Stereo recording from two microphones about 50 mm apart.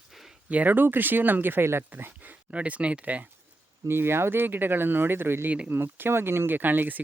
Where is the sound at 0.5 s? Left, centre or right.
Right.